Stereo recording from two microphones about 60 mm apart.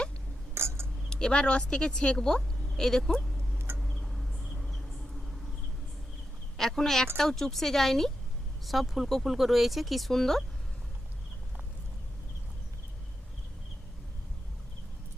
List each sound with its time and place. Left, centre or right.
0.5 s a sound: right
1.1 s a woman's voice: centre
4.0 s insect: centre
6.6 s a woman's voice: centre